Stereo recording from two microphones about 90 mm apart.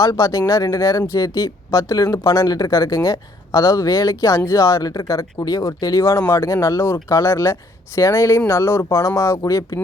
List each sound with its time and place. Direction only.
0.2 s speech: 35° left (ahead or behind)